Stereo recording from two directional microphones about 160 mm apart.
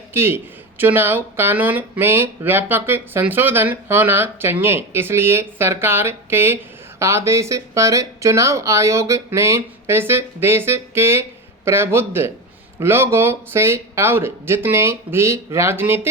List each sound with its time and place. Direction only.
0.1 s speech: 15° right (ahead or behind)